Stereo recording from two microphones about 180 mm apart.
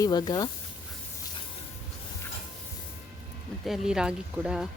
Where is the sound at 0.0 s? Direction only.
20° left (ahead or behind).